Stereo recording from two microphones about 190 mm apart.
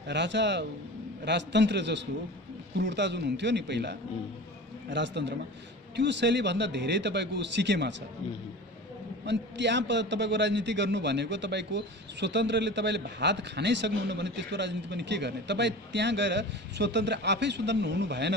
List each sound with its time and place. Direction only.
0.1 s a man's voice: 70° right (ahead or behind)
9.2 s a man's voice: 65° right (ahead or behind)